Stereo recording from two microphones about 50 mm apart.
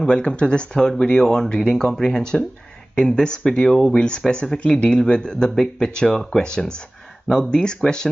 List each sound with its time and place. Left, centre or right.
0.0 s speech: left